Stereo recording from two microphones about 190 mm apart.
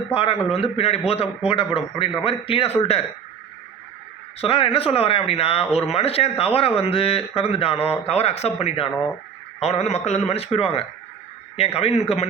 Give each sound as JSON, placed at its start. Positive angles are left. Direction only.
{"t": 0.1, "sound": "a man's voice", "side_deg": 30}
{"t": 4.4, "sound": "speech", "side_deg": 30}